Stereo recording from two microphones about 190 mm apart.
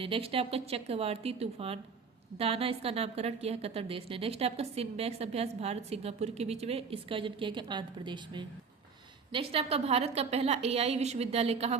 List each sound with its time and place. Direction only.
0.0 s a woman's voice: 30° right (ahead or behind)